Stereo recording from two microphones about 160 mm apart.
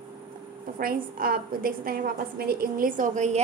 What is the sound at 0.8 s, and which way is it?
A woman's voice, 65° right (ahead or behind).